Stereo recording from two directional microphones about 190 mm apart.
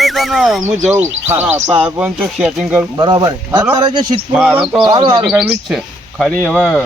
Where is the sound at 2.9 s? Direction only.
20° right (ahead or behind).